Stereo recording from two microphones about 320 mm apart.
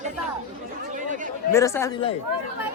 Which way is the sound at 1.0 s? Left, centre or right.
Right.